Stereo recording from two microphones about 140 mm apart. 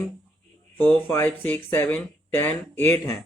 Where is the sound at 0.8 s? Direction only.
15° left (ahead or behind).